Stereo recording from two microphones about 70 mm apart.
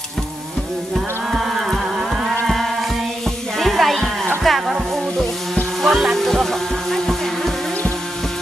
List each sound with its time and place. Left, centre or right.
0.9 s music: centre
4.4 s a sound: centre
5.8 s music: centre